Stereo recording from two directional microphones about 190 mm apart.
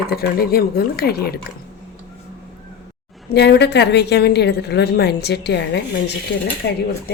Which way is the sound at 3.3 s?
60° left (ahead or behind).